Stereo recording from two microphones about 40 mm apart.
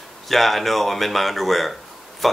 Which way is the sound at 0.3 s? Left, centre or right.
Centre.